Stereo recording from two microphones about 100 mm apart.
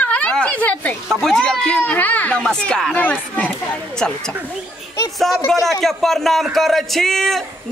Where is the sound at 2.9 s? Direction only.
15° left (ahead or behind).